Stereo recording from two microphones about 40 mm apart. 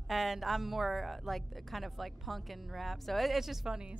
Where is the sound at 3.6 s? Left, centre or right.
Centre.